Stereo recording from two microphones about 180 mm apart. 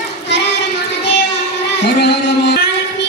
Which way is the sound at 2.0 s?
65° left (ahead or behind).